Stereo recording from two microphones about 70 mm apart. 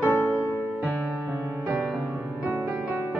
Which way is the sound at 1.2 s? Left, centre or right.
Right.